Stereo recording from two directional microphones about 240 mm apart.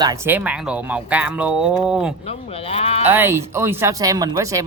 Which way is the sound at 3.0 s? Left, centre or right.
Centre.